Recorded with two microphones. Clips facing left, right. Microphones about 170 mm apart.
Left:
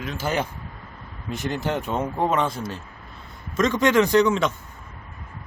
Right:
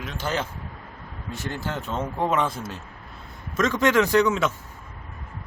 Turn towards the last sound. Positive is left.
turn(degrees=-5)  # may be behind; listen again after turning